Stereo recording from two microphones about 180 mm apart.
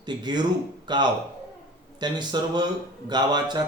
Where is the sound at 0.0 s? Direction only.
25° right (ahead or behind).